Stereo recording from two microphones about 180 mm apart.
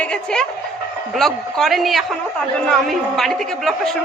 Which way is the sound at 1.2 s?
Centre (ahead or behind).